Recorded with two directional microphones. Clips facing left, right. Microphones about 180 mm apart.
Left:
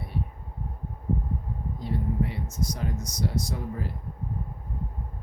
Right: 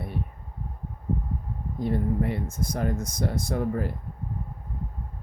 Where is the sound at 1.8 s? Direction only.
55° right (ahead or behind).